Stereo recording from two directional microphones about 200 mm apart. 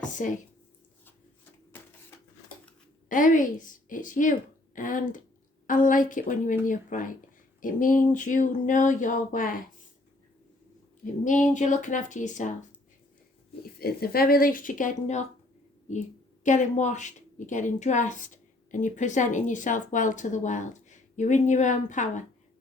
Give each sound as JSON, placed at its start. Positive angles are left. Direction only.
{"t": 0.0, "sound": "a sound", "side_deg": 40}
{"t": 3.1, "sound": "speech", "side_deg": 40}
{"t": 11.0, "sound": "speech", "side_deg": 40}
{"t": 13.7, "sound": "a woman's voice", "side_deg": 50}